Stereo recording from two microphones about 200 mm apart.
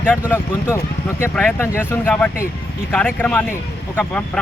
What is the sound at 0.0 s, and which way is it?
Speech, 10° left (ahead or behind).